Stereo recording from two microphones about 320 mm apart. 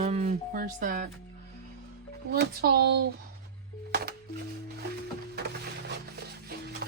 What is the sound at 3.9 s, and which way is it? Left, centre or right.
Music, right.